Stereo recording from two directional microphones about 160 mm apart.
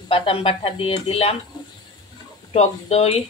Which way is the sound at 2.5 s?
40° left (ahead or behind).